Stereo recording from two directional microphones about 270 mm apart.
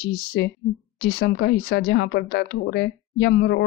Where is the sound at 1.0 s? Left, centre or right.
Left.